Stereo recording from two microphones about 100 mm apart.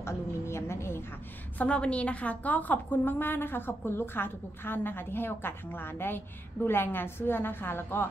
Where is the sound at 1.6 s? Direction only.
10° left (ahead or behind).